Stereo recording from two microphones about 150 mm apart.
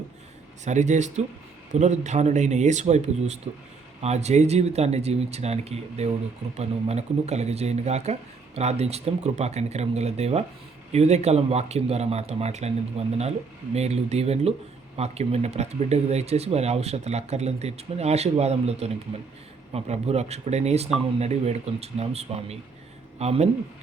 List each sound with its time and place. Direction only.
0.6 s speech: 50° right (ahead or behind)